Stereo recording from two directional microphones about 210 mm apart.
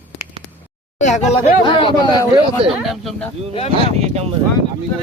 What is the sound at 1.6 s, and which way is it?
Speech, 25° left (ahead or behind).